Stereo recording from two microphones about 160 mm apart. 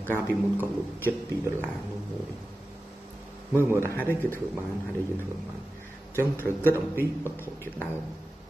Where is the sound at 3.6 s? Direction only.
15° left (ahead or behind).